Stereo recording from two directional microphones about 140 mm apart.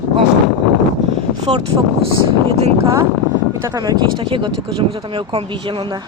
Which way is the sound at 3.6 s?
25° right (ahead or behind).